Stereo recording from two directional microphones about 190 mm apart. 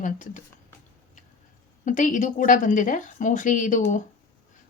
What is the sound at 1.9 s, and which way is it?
Speech, 40° left (ahead or behind).